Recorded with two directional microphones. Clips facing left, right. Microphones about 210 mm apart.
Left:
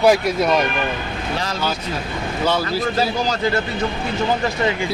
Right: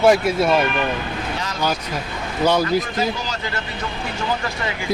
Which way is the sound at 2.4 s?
15° right (ahead or behind).